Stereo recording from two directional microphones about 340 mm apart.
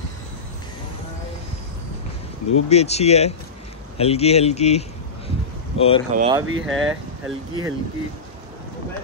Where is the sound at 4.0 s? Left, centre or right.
Centre.